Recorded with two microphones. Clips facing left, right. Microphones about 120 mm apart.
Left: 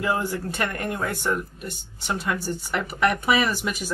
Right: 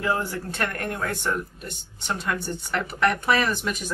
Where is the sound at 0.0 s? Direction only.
10° left (ahead or behind).